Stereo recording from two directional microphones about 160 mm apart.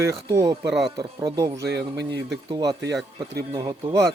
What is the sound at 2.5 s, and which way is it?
A man's voice, 25° right (ahead or behind).